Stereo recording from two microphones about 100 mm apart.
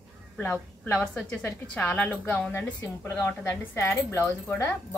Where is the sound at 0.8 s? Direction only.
15° left (ahead or behind).